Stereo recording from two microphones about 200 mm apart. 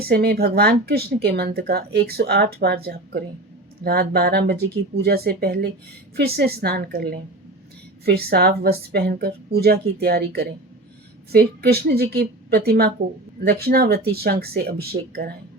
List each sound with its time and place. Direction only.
0.0 s speech: 50° right (ahead or behind)